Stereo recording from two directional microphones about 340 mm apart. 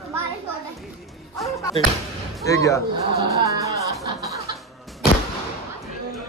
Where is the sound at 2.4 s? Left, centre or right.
Centre.